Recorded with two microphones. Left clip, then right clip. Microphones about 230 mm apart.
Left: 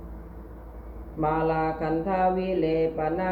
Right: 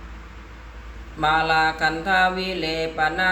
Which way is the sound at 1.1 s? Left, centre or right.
Right.